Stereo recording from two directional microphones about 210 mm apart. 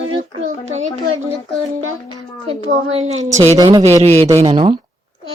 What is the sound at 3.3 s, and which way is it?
Speech, 35° right (ahead or behind).